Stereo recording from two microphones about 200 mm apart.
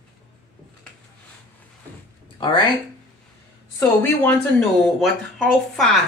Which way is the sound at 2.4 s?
25° left (ahead or behind).